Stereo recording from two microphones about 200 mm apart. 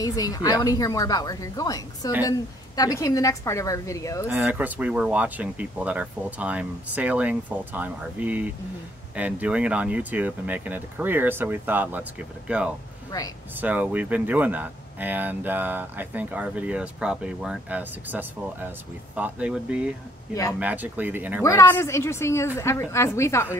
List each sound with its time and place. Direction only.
0.0 s a woman's voice: 15° left (ahead or behind)
4.3 s speech: 10° right (ahead or behind)
21.4 s a woman's voice: 15° left (ahead or behind)